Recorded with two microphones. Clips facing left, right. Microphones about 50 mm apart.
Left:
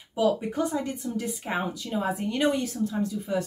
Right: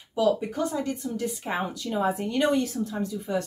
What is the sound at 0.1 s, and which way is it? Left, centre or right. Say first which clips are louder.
Speech: right 1 dB; centre.